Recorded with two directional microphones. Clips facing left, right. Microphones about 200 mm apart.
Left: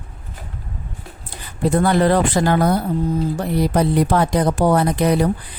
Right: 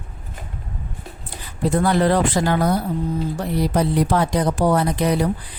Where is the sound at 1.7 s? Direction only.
55° left (ahead or behind).